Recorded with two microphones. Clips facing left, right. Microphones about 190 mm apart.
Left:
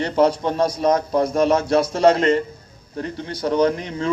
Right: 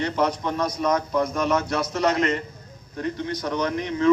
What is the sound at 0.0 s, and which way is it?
A man's voice, 30° left (ahead or behind).